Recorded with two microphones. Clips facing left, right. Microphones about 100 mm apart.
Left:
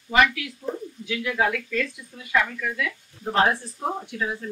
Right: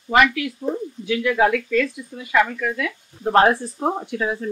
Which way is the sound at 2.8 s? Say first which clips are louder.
Right 3 dB; 65° right (ahead or behind).